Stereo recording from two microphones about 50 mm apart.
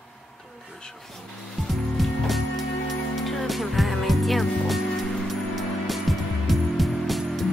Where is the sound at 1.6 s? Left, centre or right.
Centre.